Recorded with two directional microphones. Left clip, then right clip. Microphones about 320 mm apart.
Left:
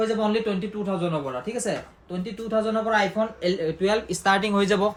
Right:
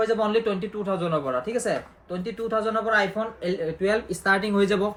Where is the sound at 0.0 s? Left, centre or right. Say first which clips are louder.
Right 1 dB; centre.